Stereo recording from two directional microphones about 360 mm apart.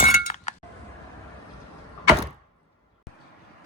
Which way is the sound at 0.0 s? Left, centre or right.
Left.